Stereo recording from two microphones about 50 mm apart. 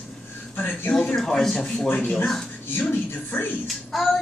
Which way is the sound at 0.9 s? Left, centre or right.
Centre.